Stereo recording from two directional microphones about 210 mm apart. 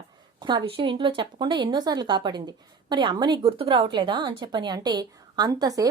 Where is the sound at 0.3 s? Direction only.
20° right (ahead or behind).